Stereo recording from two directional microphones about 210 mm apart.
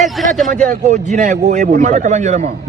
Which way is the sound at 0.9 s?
35° right (ahead or behind).